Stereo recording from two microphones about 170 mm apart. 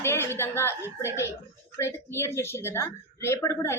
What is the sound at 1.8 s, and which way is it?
A woman's voice, 15° left (ahead or behind).